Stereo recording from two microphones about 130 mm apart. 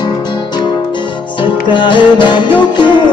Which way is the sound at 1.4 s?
40° left (ahead or behind).